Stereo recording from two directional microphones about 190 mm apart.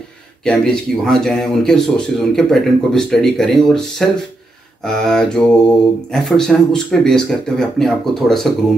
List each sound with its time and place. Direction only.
0.4 s speech: 5° left (ahead or behind)